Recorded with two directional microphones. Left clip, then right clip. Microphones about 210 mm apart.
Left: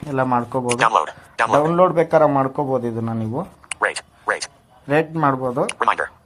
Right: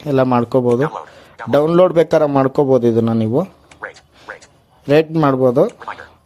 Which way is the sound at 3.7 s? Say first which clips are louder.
Left 10 dB; 50° left (ahead or behind).